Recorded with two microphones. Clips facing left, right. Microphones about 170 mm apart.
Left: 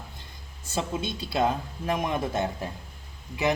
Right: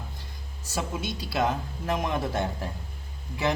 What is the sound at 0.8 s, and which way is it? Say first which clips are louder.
Speech: left 2 dB; 25° left (ahead or behind).